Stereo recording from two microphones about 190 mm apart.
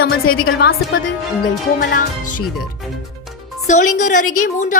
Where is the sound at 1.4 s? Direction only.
45° left (ahead or behind).